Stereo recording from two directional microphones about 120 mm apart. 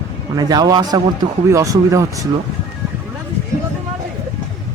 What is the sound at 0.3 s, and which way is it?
Speech, 35° right (ahead or behind).